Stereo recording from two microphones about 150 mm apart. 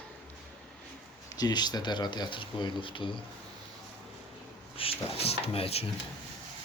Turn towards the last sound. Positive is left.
turn(degrees=40)  # may be behind; listen again after turning